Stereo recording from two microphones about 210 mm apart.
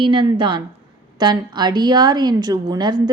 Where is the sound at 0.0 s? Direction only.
25° right (ahead or behind).